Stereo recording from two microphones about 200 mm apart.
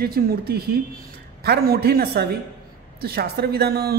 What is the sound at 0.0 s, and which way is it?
A man's voice, 50° right (ahead or behind).